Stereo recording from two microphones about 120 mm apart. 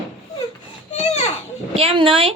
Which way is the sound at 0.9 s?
60° left (ahead or behind).